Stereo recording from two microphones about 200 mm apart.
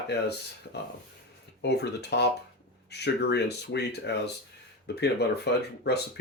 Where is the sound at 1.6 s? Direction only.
55° left (ahead or behind).